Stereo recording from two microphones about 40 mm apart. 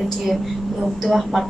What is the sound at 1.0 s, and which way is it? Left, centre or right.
Speech, centre.